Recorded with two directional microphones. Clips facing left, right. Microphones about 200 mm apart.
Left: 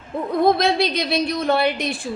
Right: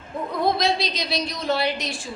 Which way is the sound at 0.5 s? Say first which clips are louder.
Left 5 dB; 55° left (ahead or behind).